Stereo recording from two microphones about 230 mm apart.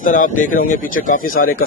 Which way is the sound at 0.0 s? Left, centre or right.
Left.